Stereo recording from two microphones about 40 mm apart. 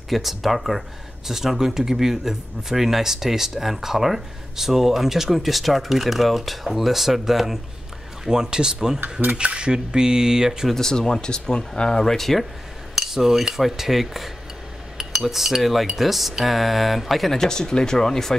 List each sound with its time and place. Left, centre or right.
0.1 s speech: centre
9.4 s speech: right
10.7 s speech: centre
12.9 s speech: centre
15.0 s cutlery: centre
16.0 s speech: centre